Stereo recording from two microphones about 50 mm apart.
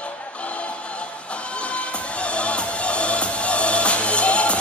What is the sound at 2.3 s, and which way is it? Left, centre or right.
Music, left.